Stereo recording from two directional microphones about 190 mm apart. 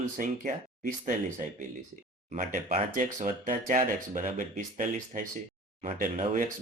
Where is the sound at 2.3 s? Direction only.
45° right (ahead or behind).